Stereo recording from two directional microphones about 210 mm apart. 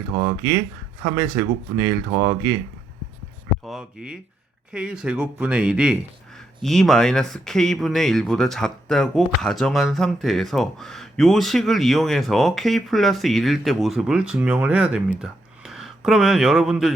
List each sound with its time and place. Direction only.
0.1 s speech: 15° right (ahead or behind)
3.6 s speech: centre (ahead or behind)